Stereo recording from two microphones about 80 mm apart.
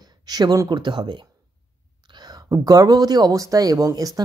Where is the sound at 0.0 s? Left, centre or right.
Right.